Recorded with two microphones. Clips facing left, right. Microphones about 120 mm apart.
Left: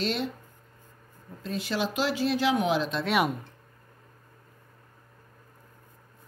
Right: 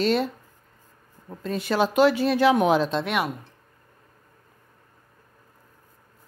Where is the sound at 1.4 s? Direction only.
50° right (ahead or behind).